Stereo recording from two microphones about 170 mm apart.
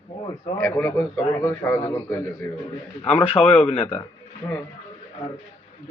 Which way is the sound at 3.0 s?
30° left (ahead or behind).